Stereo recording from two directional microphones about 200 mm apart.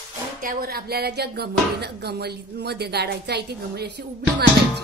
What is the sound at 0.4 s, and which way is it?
Speech, 45° right (ahead or behind).